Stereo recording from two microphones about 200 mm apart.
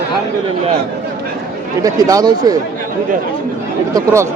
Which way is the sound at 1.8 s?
20° right (ahead or behind).